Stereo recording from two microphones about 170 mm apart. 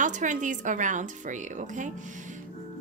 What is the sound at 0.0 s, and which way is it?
A woman's voice, 50° right (ahead or behind).